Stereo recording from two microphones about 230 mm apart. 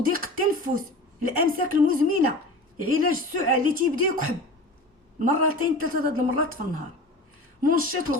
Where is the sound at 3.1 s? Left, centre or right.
Right.